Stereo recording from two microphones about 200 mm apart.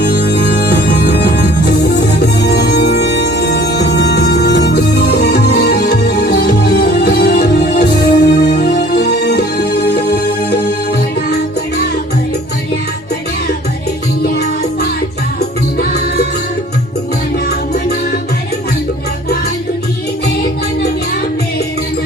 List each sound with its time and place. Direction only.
0.0 s music: 55° left (ahead or behind)